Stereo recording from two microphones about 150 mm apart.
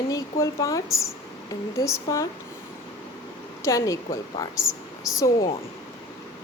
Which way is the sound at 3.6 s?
20° left (ahead or behind).